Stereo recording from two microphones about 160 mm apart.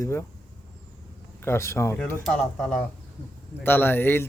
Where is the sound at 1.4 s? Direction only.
15° left (ahead or behind).